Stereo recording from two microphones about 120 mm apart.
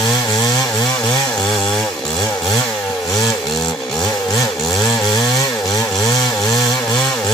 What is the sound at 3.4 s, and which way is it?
Chainsaw, centre (ahead or behind).